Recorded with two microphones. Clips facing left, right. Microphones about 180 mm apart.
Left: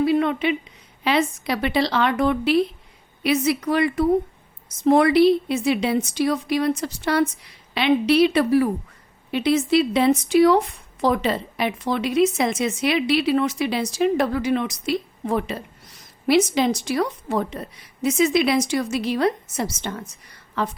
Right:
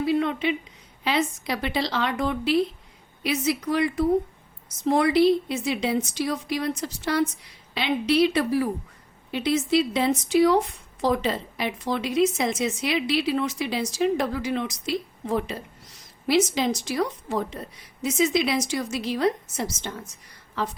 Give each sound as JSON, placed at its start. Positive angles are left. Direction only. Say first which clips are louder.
{"t": 0.0, "sound": "a woman's voice", "louder": "left 4 dB", "side_deg": 60}
{"t": 19.9, "sound": "a woman's voice", "louder": "left 4 dB", "side_deg": 75}